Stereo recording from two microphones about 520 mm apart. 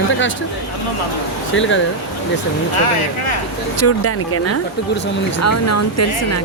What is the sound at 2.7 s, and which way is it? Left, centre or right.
Speech, left.